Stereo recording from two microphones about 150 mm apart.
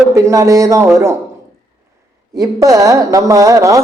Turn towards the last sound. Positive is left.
turn(degrees=-20)  # may be behind; listen again after turning